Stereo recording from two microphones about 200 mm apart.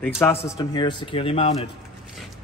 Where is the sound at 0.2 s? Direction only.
15° left (ahead or behind); by 1.7 s 30° left (ahead or behind).